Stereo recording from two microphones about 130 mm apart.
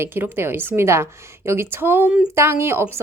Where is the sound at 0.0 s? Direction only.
15° right (ahead or behind).